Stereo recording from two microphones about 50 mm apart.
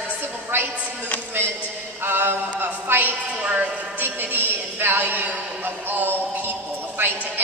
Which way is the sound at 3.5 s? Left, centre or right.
Right.